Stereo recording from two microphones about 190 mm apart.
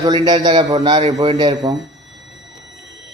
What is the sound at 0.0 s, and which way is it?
A man's voice, 20° right (ahead or behind).